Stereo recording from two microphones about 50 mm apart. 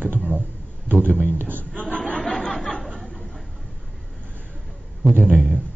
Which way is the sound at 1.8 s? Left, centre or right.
Left.